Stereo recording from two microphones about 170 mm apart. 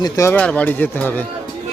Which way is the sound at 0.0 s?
20° left (ahead or behind).